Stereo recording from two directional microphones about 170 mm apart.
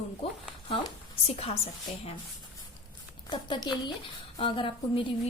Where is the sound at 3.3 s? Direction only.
25° left (ahead or behind).